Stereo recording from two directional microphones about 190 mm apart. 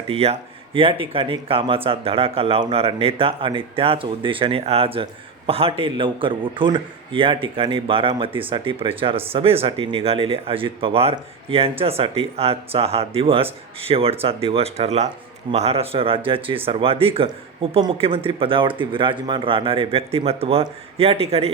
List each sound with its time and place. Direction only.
0.1 s a man's voice: 30° right (ahead or behind)